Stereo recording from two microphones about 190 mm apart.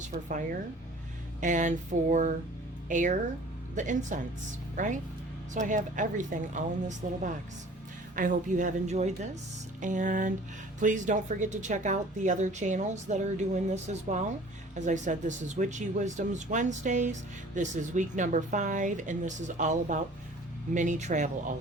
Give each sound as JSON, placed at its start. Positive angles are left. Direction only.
{"t": 0.0, "sound": "speech", "side_deg": -40}